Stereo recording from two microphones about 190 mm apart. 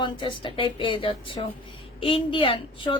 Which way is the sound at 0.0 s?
25° left (ahead or behind).